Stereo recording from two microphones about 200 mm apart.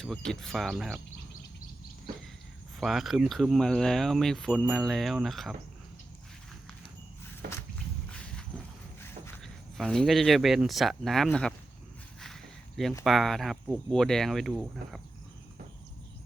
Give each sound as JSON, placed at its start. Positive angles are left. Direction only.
{"t": 0.0, "sound": "speech", "side_deg": 5}
{"t": 2.8, "sound": "speech", "side_deg": 0}
{"t": 7.4, "sound": "walk", "side_deg": -55}
{"t": 8.1, "sound": "a sound", "side_deg": 5}
{"t": 9.7, "sound": "speech", "side_deg": 0}
{"t": 12.2, "sound": "a sound", "side_deg": 0}
{"t": 13.1, "sound": "speech", "side_deg": 0}